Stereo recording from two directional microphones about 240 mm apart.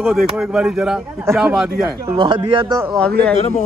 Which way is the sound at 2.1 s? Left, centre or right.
Centre.